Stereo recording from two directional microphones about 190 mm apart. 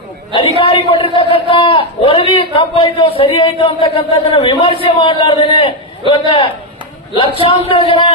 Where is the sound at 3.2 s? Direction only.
25° left (ahead or behind).